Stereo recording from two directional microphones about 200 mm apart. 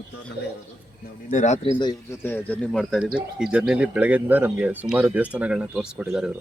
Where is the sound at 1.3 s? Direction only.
35° left (ahead or behind).